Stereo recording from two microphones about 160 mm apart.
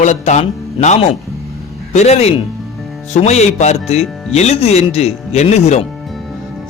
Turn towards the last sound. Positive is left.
turn(degrees=45)  # may be behind; listen again after turning